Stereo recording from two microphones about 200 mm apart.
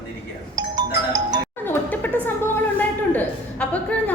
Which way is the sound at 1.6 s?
10° left (ahead or behind).